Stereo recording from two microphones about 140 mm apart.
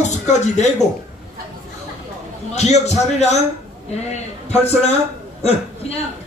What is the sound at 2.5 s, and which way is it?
Speech, 50° left (ahead or behind).